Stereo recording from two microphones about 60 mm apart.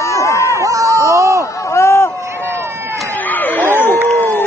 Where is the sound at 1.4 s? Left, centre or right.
Left.